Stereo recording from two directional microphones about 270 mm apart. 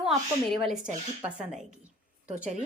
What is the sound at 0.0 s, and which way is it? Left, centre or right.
Speech, centre.